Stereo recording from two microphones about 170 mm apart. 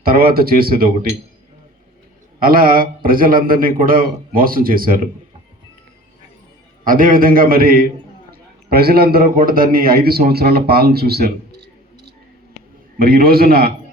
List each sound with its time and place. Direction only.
0.0 s a man's voice: 60° right (ahead or behind)
2.4 s a man's voice: 60° right (ahead or behind)
6.8 s a man's voice: 55° right (ahead or behind)
13.0 s a man's voice: 65° right (ahead or behind)